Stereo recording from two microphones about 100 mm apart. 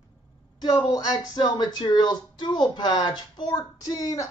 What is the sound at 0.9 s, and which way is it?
Speech, 40° left (ahead or behind).